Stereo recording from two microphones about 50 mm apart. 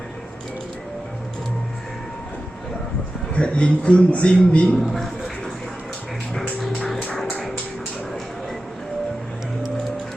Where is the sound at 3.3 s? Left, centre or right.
Left.